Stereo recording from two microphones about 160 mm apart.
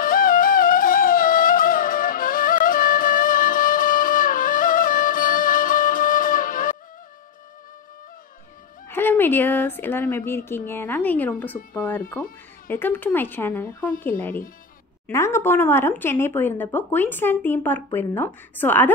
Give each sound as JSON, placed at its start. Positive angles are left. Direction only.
{"t": 0.0, "sound": "music", "side_deg": 65}
{"t": 8.8, "sound": "speech", "side_deg": 15}